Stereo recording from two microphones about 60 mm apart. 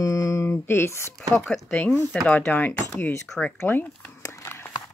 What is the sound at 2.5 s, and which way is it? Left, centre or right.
Speech, left.